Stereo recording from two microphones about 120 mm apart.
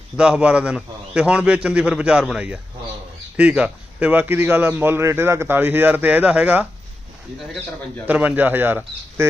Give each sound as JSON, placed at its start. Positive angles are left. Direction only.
{"t": 0.2, "sound": "a man's voice", "side_deg": -10}
{"t": 8.0, "sound": "a man's voice", "side_deg": -15}